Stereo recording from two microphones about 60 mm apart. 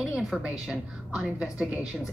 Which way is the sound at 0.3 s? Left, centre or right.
Centre.